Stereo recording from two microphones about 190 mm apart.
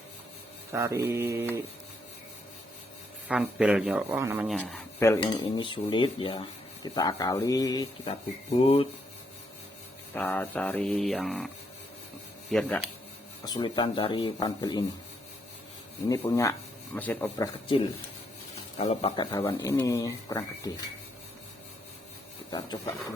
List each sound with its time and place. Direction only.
0.7 s mantra: 15° right (ahead or behind)
3.2 s a sound: 5° right (ahead or behind)
4.2 s mantra: 15° right (ahead or behind)
4.6 s speech: 10° left (ahead or behind)
5.2 s speech: 25° left (ahead or behind)
8.4 s speech: 30° left (ahead or behind)
10.2 s a sound: 10° left (ahead or behind)
13.4 s speech: 20° left (ahead or behind)
16.0 s speech: 15° left (ahead or behind)
18.8 s speech: 35° left (ahead or behind); by 20.7 s 20° left (ahead or behind)
22.4 s speech: 20° left (ahead or behind)